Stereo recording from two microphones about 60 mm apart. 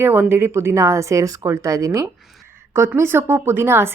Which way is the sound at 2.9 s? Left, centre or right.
Right.